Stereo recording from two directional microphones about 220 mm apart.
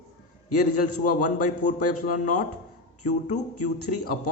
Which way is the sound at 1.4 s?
90° left.